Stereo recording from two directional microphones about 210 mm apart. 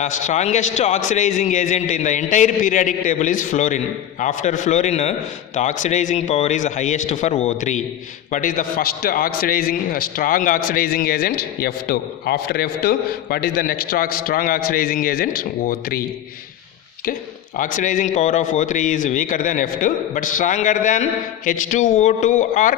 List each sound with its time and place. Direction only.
0.0 s a man's voice: 35° left (ahead or behind)
17.6 s a man's voice: 40° left (ahead or behind)